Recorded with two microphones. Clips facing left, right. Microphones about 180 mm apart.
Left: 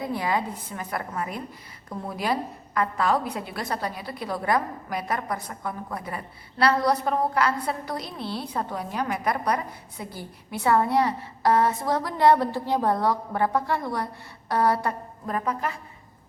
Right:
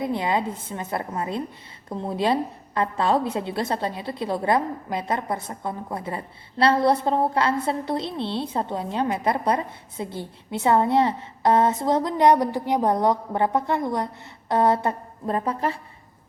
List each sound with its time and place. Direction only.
0.0 s a woman's voice: 20° right (ahead or behind)